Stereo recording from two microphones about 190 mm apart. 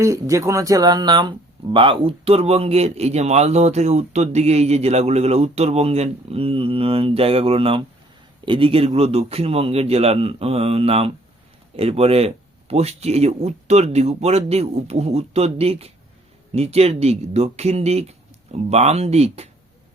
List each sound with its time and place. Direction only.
0.0 s speech: 15° right (ahead or behind); by 19.5 s 35° right (ahead or behind)